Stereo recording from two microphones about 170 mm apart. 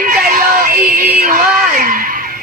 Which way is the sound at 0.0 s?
50° right (ahead or behind).